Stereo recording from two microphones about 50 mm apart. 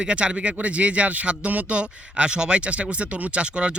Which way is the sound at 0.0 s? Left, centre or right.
Right.